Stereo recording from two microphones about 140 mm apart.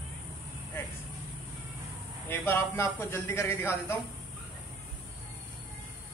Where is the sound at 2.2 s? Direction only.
15° left (ahead or behind).